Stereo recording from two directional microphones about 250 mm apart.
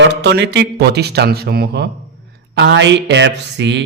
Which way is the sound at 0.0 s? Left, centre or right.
Right.